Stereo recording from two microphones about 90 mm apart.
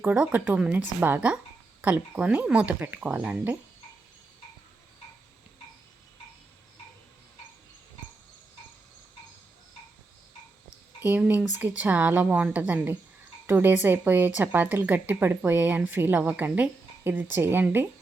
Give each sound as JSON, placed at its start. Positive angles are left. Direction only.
{"t": 0.0, "sound": "a woman's voice", "side_deg": -20}
{"t": 11.0, "sound": "a woman's voice", "side_deg": -15}